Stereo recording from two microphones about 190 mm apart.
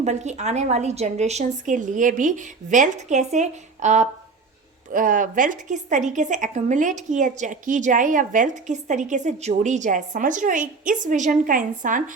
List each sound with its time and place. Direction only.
0.0 s a woman's voice: 35° right (ahead or behind)